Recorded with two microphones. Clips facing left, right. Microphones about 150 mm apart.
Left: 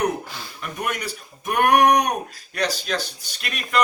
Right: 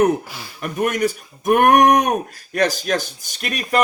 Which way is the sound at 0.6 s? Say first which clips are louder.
Right 9 dB; 50° right (ahead or behind).